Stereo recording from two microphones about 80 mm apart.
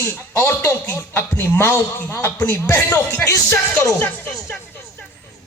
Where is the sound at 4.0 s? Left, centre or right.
Left.